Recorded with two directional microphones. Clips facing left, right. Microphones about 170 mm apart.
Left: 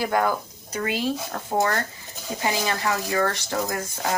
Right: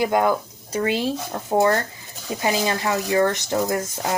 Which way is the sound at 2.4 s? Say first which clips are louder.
Right 3 dB; 20° right (ahead or behind).